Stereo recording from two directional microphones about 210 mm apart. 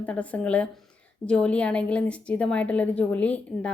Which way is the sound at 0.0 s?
5° left (ahead or behind).